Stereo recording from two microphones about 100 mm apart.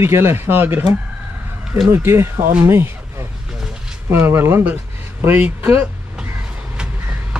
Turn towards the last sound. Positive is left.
turn(degrees=-10)  # may be behind; listen again after turning